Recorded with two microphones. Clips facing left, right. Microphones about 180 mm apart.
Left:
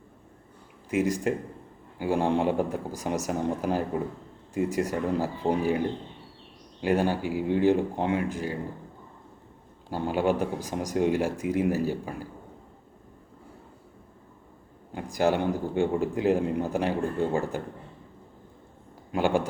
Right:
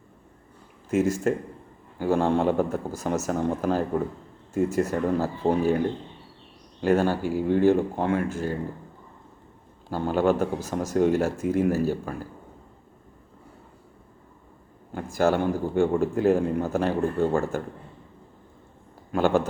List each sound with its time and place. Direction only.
0.9 s a man's voice: 15° left (ahead or behind)
6.8 s a man's voice: 15° left (ahead or behind)
9.9 s a man's voice: 10° left (ahead or behind)
14.9 s a man's voice: 15° left (ahead or behind)
19.1 s a man's voice: 10° left (ahead or behind)